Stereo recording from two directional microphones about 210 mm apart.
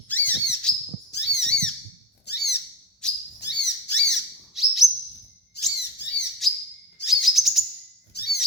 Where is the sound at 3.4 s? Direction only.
55° left (ahead or behind).